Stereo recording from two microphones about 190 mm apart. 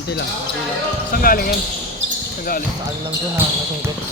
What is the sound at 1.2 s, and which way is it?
Speech, 50° left (ahead or behind).